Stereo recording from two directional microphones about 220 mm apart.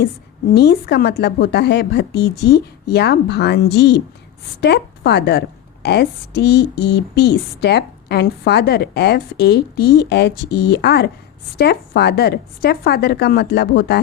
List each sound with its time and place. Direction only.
0.5 s a woman's voice: 45° left (ahead or behind)